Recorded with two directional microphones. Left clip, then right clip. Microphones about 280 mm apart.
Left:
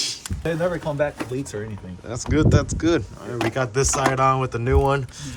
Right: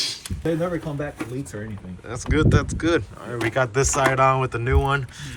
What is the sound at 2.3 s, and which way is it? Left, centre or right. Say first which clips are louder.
Speech: left 1 dB; centre.